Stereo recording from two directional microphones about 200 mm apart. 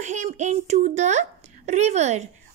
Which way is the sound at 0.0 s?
35° right (ahead or behind).